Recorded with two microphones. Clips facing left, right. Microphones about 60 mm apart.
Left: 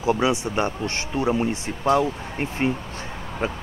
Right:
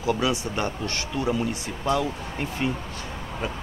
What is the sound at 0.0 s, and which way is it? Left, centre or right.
Speech, left.